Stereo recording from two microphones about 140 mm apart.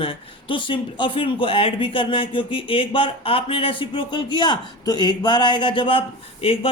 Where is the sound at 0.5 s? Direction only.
35° left (ahead or behind).